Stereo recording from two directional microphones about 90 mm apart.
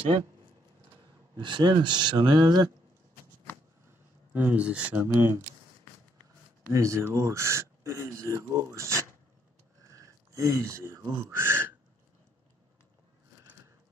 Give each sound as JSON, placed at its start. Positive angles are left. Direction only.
{"t": 1.3, "sound": "speech", "side_deg": -60}
{"t": 4.3, "sound": "speech", "side_deg": -15}
{"t": 4.9, "sound": "speech", "side_deg": -25}
{"t": 6.7, "sound": "speech", "side_deg": -35}
{"t": 9.9, "sound": "a sound", "side_deg": -40}
{"t": 11.2, "sound": "speech", "side_deg": -25}